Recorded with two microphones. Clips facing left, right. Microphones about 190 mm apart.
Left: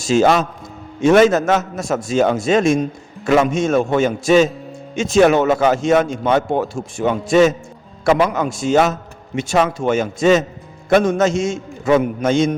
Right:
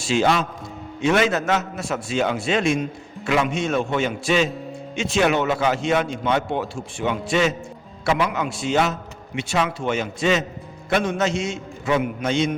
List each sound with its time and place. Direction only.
0.0 s a man's voice: 45° left (ahead or behind)